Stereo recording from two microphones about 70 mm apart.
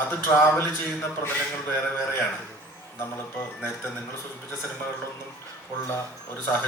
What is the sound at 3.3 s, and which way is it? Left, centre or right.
Speech, left.